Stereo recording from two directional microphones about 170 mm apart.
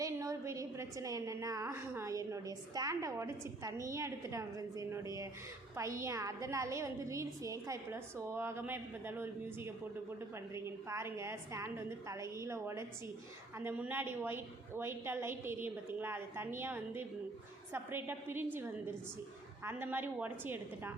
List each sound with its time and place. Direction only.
0.0 s a woman's voice: 20° right (ahead or behind)
19.6 s a woman's voice: 10° right (ahead or behind)